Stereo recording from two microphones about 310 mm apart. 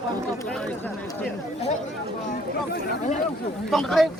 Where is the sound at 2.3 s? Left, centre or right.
Left.